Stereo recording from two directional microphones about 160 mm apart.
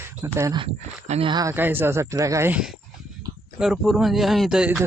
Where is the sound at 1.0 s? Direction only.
40° right (ahead or behind).